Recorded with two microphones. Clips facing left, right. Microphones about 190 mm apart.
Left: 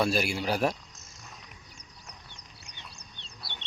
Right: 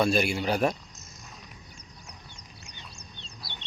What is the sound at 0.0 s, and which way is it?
Speech, 5° left (ahead or behind).